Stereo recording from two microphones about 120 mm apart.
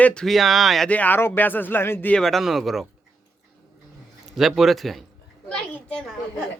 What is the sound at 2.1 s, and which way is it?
Speech, centre (ahead or behind).